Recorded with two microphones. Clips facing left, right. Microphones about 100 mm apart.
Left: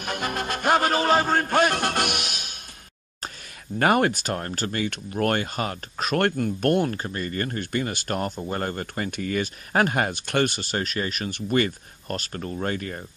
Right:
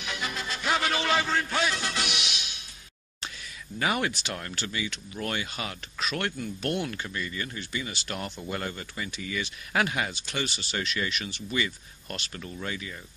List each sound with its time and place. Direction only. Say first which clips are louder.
0.0 s music: left 6 dB; 50° left (ahead or behind)
3.8 s speech: left 8 dB; 50° left (ahead or behind)